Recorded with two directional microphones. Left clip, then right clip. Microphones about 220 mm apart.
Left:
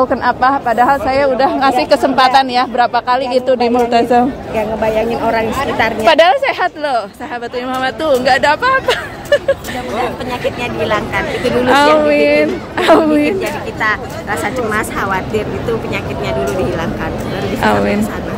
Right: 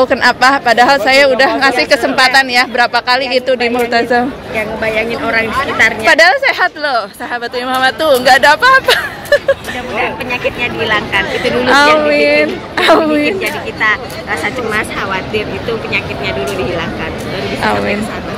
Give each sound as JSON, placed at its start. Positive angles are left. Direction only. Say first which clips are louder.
{"t": 0.0, "sound": "a woman's voice", "louder": "right 3 dB", "side_deg": 0}
{"t": 4.6, "sound": "a woman's voice", "louder": "even", "side_deg": 25}
{"t": 5.2, "sound": "a woman's voice", "louder": "right 1 dB", "side_deg": 15}
{"t": 17.6, "sound": "a woman's voice", "louder": "left 1 dB", "side_deg": 15}